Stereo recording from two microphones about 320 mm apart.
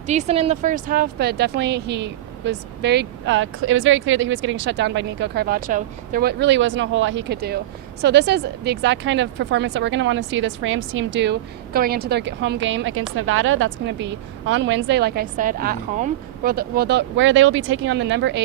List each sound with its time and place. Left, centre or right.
0.1 s speech: right